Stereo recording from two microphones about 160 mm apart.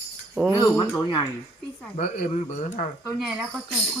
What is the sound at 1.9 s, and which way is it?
Speech, 55° left (ahead or behind).